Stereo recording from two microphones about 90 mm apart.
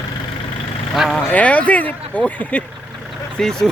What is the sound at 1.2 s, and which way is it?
Speech, 15° left (ahead or behind).